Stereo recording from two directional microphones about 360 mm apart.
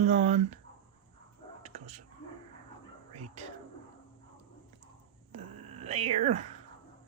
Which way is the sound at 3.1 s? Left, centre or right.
Centre.